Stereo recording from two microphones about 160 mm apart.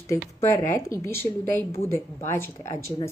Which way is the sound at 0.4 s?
15° left (ahead or behind).